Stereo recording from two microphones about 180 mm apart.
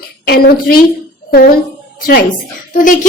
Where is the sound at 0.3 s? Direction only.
55° left (ahead or behind).